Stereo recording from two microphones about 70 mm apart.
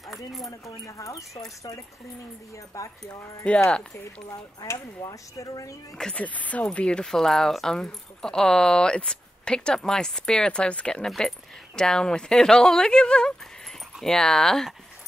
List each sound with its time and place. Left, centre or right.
0.4 s speech: left
2.7 s speech: left
3.4 s speech: centre
4.6 s speech: left
6.1 s speech: left; by 14.7 s centre